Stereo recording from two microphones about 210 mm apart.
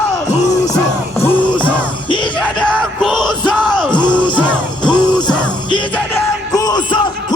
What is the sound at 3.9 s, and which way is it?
Music, 20° left (ahead or behind).